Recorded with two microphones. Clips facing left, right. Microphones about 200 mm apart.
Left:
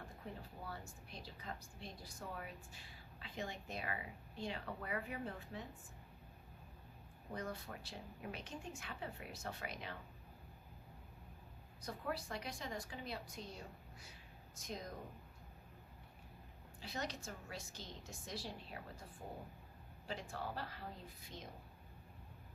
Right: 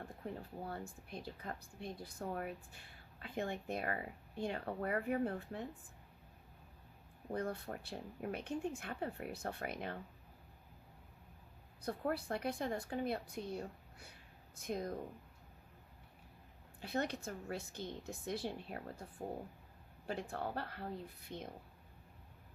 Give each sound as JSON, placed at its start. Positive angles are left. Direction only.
{"t": 0.6, "sound": "a woman's voice", "side_deg": -55}
{"t": 7.3, "sound": "speech", "side_deg": -55}
{"t": 11.8, "sound": "speech", "side_deg": -55}
{"t": 16.8, "sound": "speech", "side_deg": -55}
{"t": 20.1, "sound": "speech", "side_deg": -55}